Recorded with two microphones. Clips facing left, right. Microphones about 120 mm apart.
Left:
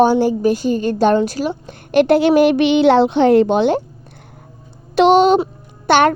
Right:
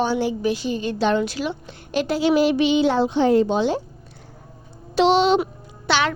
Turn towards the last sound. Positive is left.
turn(degrees=50)  # may be behind; listen again after turning